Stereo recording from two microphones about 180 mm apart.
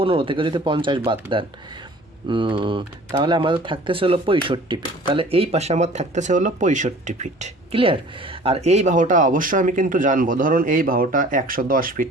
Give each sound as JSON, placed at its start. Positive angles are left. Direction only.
{"t": 0.0, "sound": "speech", "side_deg": -30}